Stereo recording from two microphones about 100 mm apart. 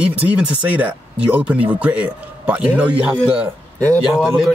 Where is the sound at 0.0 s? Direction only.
15° right (ahead or behind).